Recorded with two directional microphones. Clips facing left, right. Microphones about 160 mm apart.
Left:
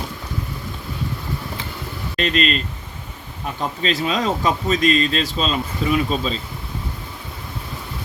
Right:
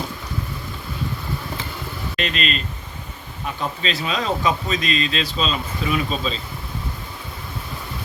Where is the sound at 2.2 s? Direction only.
40° left (ahead or behind).